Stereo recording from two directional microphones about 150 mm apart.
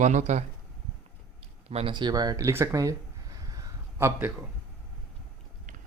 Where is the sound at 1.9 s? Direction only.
30° right (ahead or behind).